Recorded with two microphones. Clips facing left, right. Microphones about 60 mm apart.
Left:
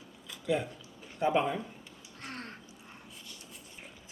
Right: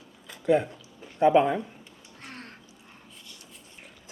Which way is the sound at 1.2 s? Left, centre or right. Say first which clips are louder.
Right 9 dB; right.